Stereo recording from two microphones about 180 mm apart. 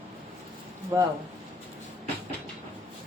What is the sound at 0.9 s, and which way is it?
Speech, 20° right (ahead or behind).